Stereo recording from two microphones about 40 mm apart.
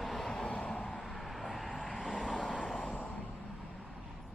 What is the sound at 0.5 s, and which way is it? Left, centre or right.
Vehicle, left.